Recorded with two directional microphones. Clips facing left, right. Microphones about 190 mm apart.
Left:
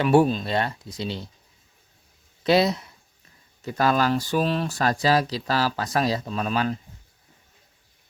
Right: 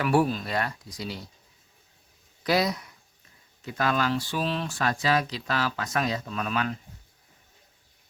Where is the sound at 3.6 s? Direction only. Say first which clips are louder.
Left 5 dB; 40° left (ahead or behind).